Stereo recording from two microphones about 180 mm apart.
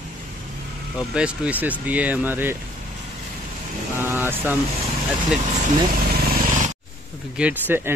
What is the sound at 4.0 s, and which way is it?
Speech, 10° right (ahead or behind).